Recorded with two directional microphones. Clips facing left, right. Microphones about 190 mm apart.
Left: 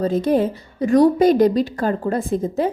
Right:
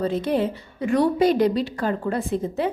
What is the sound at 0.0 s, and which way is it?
A woman's voice, 45° left (ahead or behind).